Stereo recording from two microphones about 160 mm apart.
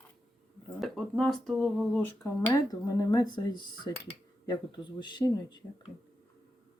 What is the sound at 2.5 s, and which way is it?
Speech, 25° left (ahead or behind).